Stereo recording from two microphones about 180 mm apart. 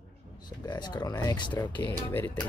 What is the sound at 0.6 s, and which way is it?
Speech, 25° left (ahead or behind).